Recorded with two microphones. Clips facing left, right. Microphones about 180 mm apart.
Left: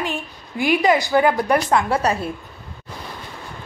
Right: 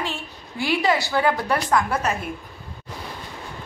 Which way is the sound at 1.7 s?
30° left (ahead or behind).